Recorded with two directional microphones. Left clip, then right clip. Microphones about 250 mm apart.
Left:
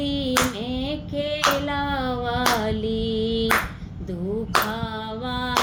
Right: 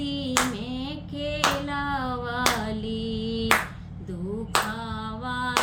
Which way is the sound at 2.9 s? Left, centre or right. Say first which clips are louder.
Left 7 dB; right.